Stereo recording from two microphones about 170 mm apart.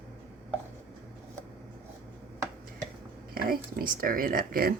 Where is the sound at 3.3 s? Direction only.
60° right (ahead or behind).